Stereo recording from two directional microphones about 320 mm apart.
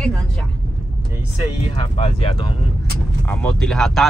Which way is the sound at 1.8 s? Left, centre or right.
Centre.